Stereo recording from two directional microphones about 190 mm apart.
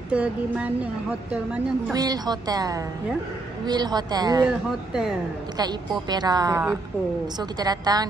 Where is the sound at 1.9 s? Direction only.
20° right (ahead or behind).